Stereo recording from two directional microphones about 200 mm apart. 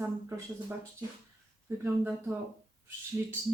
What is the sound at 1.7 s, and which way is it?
Speech, 15° right (ahead or behind).